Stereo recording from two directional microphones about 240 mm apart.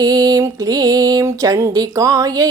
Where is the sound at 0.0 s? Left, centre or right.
Centre.